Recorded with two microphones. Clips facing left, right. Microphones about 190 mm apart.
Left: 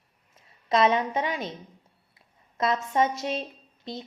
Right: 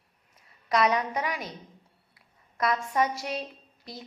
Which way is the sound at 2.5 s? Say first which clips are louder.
Left 2 dB; 25° left (ahead or behind).